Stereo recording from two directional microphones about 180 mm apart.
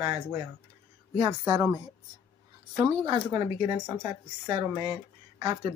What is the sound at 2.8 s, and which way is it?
Speech, 25° right (ahead or behind).